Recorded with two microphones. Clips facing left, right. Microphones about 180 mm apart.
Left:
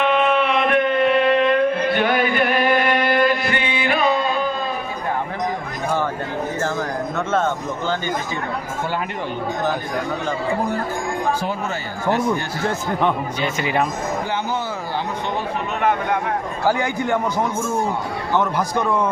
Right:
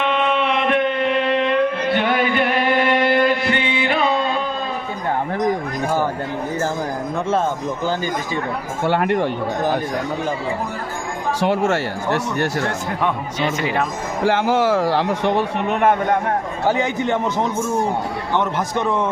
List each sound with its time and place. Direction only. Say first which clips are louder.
0.3 s music: left 1 dB; 20° right (ahead or behind)
8.9 s speech: right 11 dB; 60° right (ahead or behind)
11.3 s speech: right 7 dB; 80° right
13.6 s speech: left 3 dB; 5° left (ahead or behind)
14.3 s a man's voice: right 8 dB; 90° right; by 15.4 s 75° right (ahead or behind)
15.8 s speech: right 3 dB; 50° right (ahead or behind)
16.6 s a man's voice: right 1 dB; 20° right (ahead or behind)